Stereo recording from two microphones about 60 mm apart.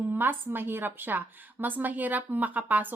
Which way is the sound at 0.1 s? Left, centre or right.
Right.